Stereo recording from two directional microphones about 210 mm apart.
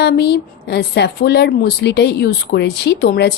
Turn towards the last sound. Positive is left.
turn(degrees=45)  # may be behind; listen again after turning